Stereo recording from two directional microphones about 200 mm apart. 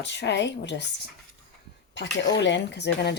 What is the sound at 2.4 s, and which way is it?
Speech, 60° left (ahead or behind).